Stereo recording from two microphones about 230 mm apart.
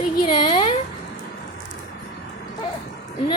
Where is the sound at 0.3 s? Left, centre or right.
Left.